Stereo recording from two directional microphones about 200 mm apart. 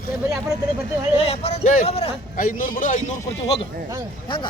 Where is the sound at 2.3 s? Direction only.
45° left (ahead or behind).